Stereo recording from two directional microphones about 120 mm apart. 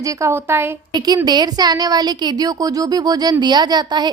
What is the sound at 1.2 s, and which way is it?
A woman's voice, 35° right (ahead or behind).